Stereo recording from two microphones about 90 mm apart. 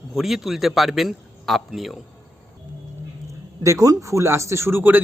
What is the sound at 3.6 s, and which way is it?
A man's voice, 40° right (ahead or behind).